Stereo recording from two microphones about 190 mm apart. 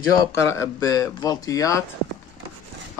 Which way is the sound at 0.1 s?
15° left (ahead or behind).